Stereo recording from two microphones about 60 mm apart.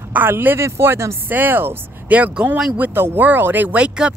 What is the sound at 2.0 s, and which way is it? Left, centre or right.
Speech, right.